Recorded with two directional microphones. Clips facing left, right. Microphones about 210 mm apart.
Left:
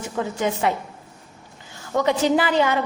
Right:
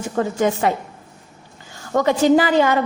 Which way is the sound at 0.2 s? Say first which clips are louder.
Right 4 dB; 45° right (ahead or behind).